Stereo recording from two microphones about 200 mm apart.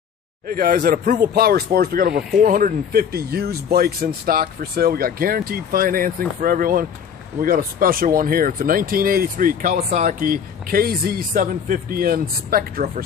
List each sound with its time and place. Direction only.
0.5 s speech: 45° right (ahead or behind)
1.3 s speech: 50° right (ahead or behind)